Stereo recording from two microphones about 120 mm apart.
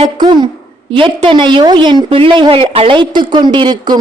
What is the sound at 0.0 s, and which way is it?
A woman's voice, 40° right (ahead or behind).